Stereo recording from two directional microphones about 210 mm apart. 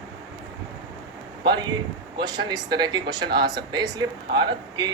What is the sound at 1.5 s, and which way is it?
Speech, 20° right (ahead or behind).